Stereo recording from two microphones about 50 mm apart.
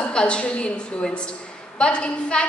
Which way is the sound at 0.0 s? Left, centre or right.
Centre.